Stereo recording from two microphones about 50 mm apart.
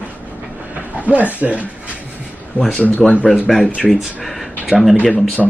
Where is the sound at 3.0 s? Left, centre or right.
Centre.